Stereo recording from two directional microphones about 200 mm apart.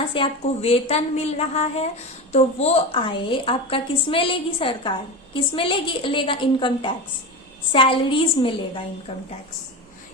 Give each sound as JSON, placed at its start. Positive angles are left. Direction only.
{"t": 0.1, "sound": "a woman's voice", "side_deg": 25}